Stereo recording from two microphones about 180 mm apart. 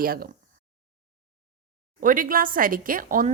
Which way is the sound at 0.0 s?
55° right (ahead or behind).